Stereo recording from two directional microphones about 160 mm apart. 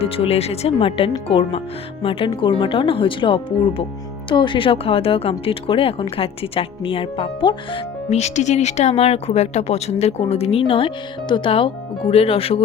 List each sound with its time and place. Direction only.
0.0 s speech: 40° left (ahead or behind)